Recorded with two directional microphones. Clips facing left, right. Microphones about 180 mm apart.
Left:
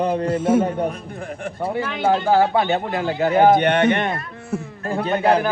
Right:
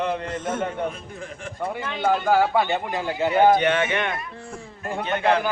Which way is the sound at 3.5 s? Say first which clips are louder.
Left 4 dB; 60° left (ahead or behind).